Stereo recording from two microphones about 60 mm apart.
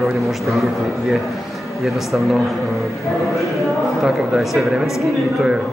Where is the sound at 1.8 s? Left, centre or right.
Centre.